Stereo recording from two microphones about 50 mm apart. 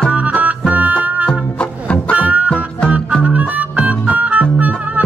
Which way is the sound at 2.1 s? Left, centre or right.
Right.